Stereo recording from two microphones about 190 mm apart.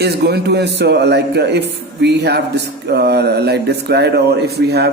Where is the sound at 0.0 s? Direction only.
60° right (ahead or behind).